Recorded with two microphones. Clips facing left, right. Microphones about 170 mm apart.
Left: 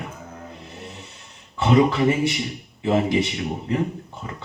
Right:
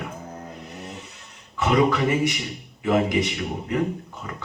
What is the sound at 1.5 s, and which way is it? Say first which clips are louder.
Speech: left 2 dB; 30° left (ahead or behind).